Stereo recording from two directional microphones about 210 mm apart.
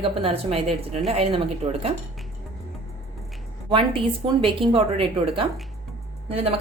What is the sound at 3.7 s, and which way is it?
A woman's voice, 25° right (ahead or behind).